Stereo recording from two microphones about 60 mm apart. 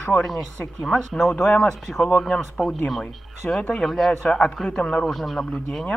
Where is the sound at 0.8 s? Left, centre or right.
Centre.